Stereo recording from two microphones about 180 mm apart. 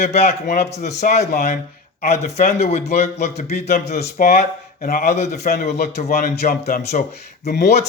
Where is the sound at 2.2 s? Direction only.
35° left (ahead or behind).